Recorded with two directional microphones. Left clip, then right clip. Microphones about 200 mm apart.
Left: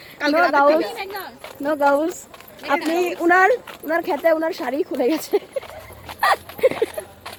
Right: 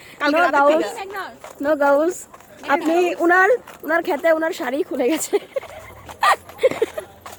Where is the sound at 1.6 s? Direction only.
40° right (ahead or behind).